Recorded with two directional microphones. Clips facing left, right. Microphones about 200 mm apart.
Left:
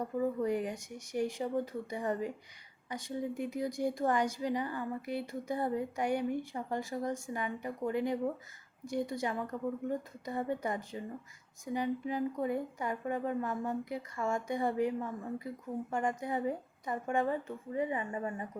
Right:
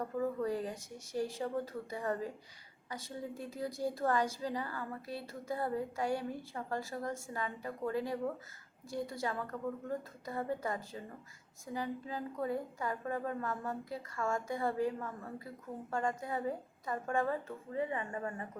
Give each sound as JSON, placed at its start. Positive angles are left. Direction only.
{"t": 0.0, "sound": "speech", "side_deg": 15}